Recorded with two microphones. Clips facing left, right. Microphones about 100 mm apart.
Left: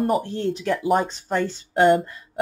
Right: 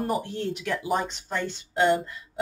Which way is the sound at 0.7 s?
45° left (ahead or behind).